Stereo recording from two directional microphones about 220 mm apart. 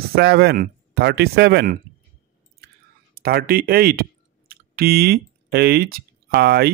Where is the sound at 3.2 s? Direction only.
45° right (ahead or behind).